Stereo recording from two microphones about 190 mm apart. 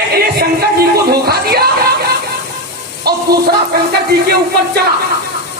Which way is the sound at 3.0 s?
55° right (ahead or behind).